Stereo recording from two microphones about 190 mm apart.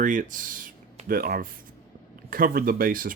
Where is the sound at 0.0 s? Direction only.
45° right (ahead or behind).